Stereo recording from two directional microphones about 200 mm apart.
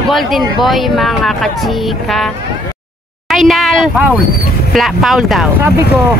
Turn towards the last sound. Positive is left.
turn(degrees=0)  # may be behind; listen again after turning